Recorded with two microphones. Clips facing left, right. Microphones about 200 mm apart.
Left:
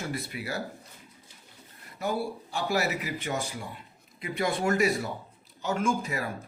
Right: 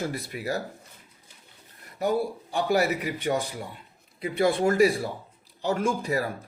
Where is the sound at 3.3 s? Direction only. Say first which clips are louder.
Right 7 dB; 40° right (ahead or behind).